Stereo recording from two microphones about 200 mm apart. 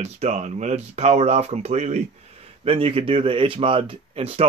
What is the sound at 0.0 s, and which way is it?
Speech, 35° right (ahead or behind).